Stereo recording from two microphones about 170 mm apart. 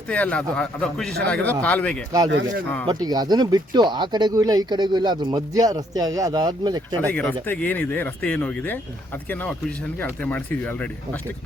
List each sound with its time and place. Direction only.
0.1 s speech: 5° left (ahead or behind)
2.9 s speech: 25° right (ahead or behind)
7.1 s speech: 10° left (ahead or behind)